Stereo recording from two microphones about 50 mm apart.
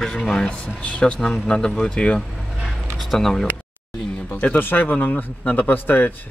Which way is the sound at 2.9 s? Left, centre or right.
Centre.